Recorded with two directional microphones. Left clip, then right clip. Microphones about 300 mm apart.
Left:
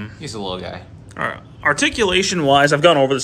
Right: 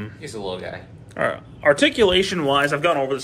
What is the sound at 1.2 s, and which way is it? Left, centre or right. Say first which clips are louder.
Speech: right 1 dB; centre.